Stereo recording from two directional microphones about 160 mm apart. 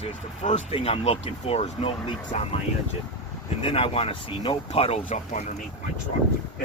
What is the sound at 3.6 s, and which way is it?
Speech, 35° left (ahead or behind).